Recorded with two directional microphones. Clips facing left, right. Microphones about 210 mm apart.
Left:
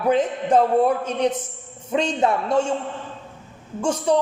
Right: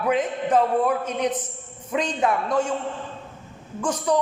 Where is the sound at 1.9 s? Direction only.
30° left (ahead or behind).